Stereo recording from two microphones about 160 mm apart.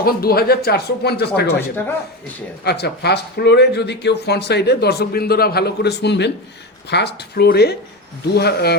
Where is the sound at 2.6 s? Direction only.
90° left.